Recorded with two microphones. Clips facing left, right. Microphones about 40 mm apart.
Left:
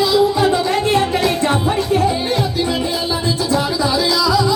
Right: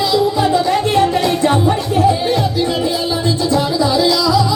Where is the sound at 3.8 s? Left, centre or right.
Centre.